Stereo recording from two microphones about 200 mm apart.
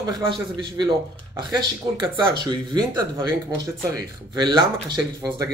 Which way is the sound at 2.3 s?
20° right (ahead or behind).